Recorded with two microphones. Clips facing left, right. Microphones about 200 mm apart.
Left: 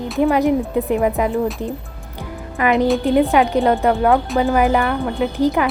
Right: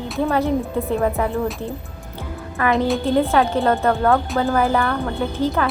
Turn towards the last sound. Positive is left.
turn(degrees=15)  # may be behind; listen again after turning